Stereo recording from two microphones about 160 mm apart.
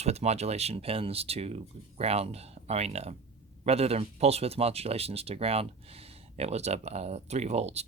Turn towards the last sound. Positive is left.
turn(degrees=-40)  # may be behind; listen again after turning